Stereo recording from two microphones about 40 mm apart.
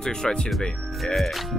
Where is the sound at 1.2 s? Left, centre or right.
Centre.